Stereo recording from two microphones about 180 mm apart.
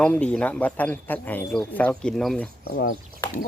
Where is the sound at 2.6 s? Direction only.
55° left (ahead or behind).